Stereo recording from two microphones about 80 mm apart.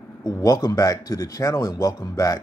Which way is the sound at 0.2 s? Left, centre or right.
Left.